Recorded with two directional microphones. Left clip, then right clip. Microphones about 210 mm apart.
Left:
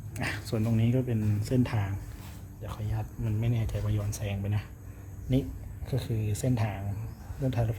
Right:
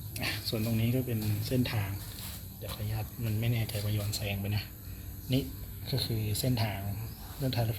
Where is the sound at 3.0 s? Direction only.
5° left (ahead or behind).